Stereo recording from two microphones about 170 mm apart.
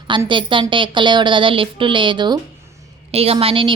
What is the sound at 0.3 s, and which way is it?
A woman's voice, 30° right (ahead or behind).